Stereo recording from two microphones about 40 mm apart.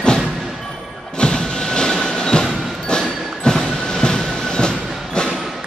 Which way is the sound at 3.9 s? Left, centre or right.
Centre.